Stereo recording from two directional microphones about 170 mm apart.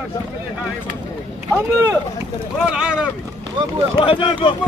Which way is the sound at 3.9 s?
30° left (ahead or behind).